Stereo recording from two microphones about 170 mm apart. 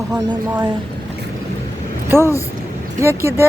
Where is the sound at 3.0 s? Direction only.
15° right (ahead or behind).